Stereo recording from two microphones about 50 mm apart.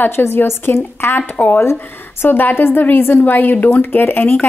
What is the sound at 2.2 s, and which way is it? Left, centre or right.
Speech, left.